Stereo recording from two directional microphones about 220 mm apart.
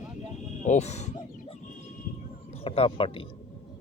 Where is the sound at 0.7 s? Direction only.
30° left (ahead or behind).